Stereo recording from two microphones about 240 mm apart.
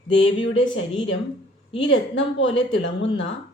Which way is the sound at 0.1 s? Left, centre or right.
Left.